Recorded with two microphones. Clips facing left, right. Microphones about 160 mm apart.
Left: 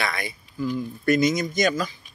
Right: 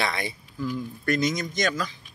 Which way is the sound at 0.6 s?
5° left (ahead or behind).